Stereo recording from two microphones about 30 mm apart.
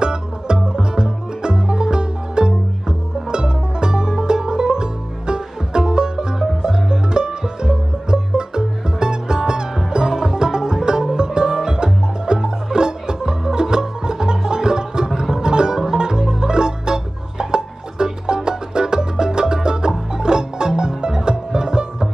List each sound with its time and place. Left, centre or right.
0.0 s music: right